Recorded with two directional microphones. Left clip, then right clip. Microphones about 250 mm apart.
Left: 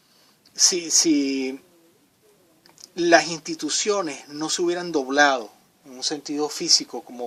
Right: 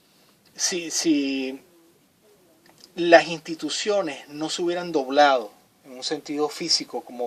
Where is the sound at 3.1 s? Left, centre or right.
Left.